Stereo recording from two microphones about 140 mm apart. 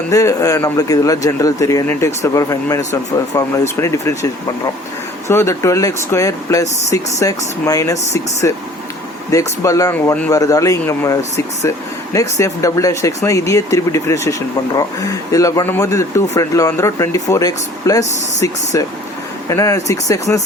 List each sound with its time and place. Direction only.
0.1 s speech: 25° left (ahead or behind)